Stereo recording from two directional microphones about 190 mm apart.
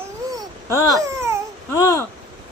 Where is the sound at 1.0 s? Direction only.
15° right (ahead or behind).